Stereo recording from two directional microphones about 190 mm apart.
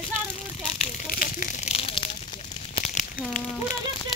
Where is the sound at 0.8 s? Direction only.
45° left (ahead or behind); by 2.1 s 30° left (ahead or behind).